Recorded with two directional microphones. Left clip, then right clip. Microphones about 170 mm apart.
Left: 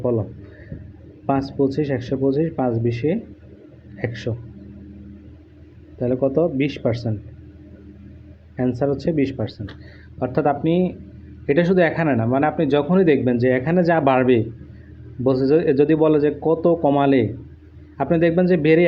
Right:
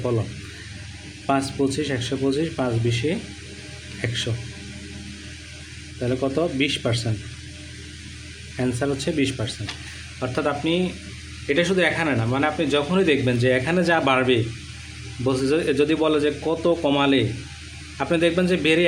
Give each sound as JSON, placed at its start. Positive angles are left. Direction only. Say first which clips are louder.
{"t": 1.3, "sound": "speech", "louder": "left 2 dB", "side_deg": 10}
{"t": 6.0, "sound": "speech", "louder": "left 4 dB", "side_deg": 0}
{"t": 8.5, "sound": "speech", "louder": "left 3 dB", "side_deg": 5}
{"t": 10.3, "sound": "speech", "louder": "left 4 dB", "side_deg": 25}